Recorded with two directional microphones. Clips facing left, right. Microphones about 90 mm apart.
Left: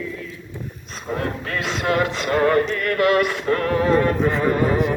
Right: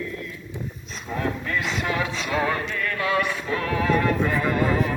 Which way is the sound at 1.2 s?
55° left (ahead or behind).